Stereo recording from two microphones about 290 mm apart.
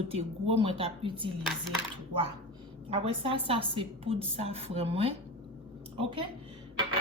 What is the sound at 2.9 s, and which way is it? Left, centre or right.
A woman's voice, centre.